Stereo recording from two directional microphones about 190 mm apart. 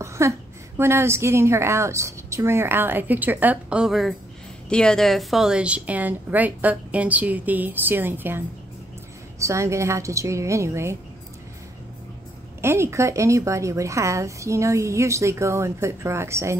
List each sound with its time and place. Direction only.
0.0 s a sound: 15° right (ahead or behind)
0.7 s a woman's voice: 15° right (ahead or behind)
12.6 s a woman's voice: 15° right (ahead or behind)